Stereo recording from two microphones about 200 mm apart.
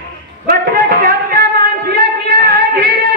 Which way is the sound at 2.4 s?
50° right (ahead or behind).